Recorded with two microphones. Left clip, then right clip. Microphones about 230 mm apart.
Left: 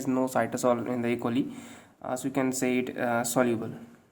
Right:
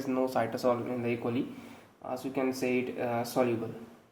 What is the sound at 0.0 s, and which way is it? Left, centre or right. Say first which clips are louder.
Speech: left 2 dB; left.